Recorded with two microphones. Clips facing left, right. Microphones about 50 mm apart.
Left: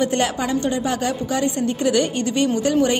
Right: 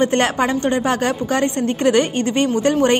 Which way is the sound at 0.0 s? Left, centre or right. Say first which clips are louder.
Right 4 dB; right.